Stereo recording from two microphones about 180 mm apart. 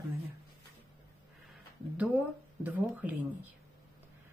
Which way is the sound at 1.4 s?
Centre (ahead or behind).